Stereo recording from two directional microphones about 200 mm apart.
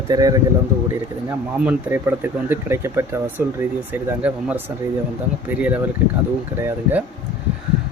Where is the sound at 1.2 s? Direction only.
10° right (ahead or behind).